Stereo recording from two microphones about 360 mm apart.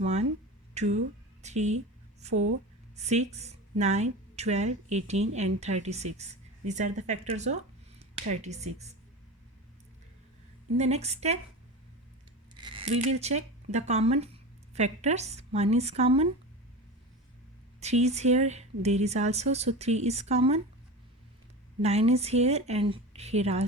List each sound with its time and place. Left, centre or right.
0.0 s speech: centre
2.3 s speech: right
2.9 s a woman's voice: centre
10.8 s a woman's voice: centre
12.5 s speech: centre
17.7 s a woman's voice: centre
21.8 s a woman's voice: centre